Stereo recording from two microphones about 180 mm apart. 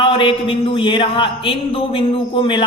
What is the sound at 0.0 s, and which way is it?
Speech, 30° left (ahead or behind).